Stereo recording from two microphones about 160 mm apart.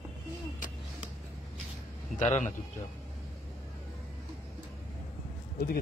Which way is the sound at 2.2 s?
50° left (ahead or behind).